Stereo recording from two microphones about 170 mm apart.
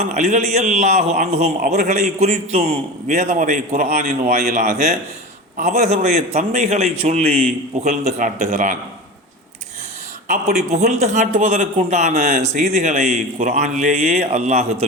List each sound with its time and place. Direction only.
0.0 s a man's voice: 45° right (ahead or behind)
10.2 s speech: 45° right (ahead or behind)